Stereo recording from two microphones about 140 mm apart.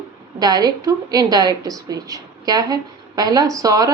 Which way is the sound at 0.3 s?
30° right (ahead or behind).